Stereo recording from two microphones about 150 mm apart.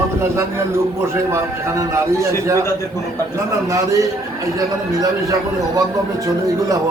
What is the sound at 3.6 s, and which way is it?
A man's voice, 20° right (ahead or behind).